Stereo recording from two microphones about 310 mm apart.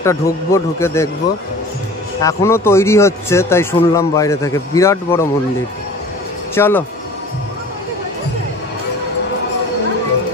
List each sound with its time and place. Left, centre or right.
0.0 s a man's voice: centre
2.2 s a man's voice: centre
6.5 s speech: centre